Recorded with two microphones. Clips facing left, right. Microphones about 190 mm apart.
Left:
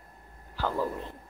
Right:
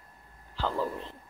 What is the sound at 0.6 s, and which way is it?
Speech, 15° left (ahead or behind).